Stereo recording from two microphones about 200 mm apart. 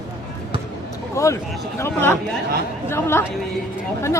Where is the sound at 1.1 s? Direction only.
15° left (ahead or behind).